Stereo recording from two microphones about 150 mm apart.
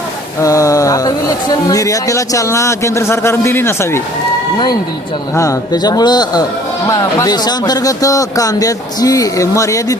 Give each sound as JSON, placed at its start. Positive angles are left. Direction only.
{"t": 0.4, "sound": "speech", "side_deg": 20}
{"t": 4.5, "sound": "speech", "side_deg": 30}